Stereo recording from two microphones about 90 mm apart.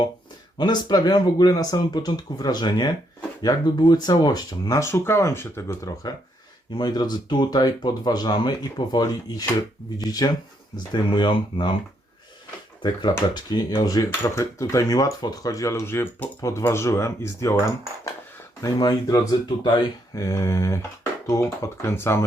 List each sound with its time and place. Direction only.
0.6 s speech: 50° left (ahead or behind)
4.8 s speech: 30° left (ahead or behind)
6.7 s speech: 50° left (ahead or behind)
10.9 s speech: 65° left (ahead or behind)
12.8 s speech: 55° left (ahead or behind)
14.1 s speech: 35° left (ahead or behind)
18.6 s speech: 45° left (ahead or behind); by 22.2 s 30° left (ahead or behind)